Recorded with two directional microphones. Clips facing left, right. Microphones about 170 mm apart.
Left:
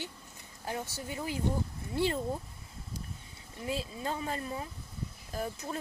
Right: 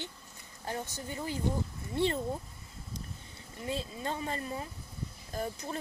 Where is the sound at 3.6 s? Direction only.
5° left (ahead or behind).